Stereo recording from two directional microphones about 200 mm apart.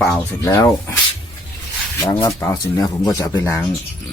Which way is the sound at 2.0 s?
15° left (ahead or behind).